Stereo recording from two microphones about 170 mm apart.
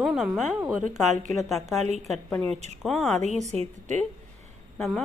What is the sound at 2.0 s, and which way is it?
Speech, centre (ahead or behind).